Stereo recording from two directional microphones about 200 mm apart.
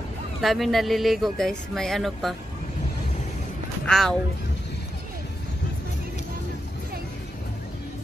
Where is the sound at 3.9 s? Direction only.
Centre (ahead or behind).